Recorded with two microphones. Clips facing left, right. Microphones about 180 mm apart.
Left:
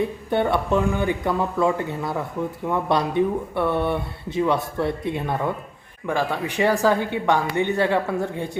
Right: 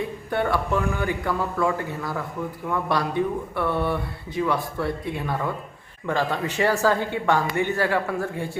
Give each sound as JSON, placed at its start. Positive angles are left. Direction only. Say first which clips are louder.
{"t": 0.3, "sound": "a woman's voice", "louder": "left 2 dB", "side_deg": 25}